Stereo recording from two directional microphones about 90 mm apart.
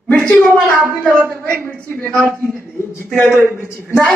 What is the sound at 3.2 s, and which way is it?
Speech, 20° left (ahead or behind).